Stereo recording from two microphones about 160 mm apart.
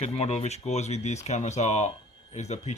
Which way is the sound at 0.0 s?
40° left (ahead or behind).